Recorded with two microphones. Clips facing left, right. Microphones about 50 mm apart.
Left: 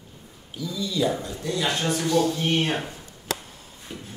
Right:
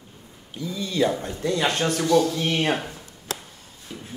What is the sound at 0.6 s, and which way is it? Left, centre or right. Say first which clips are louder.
Speech: right 2 dB; right.